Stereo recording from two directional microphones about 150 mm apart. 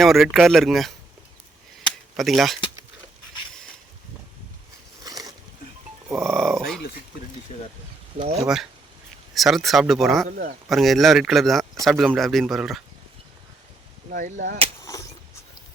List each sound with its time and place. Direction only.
0.0 s speech: centre (ahead or behind)
2.1 s speech: centre (ahead or behind)
5.0 s a sound: 25° right (ahead or behind)
6.1 s speech: 15° right (ahead or behind)
6.3 s speech: centre (ahead or behind)
8.2 s speech: 45° right (ahead or behind)
9.3 s speech: centre (ahead or behind)
10.2 s speech: 75° right (ahead or behind)
10.7 s speech: centre (ahead or behind)
14.1 s speech: 65° right (ahead or behind)